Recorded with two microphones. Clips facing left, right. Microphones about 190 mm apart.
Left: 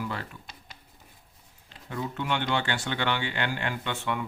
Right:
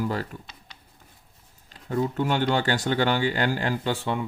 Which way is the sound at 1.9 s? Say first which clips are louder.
Right 6 dB; 40° right (ahead or behind).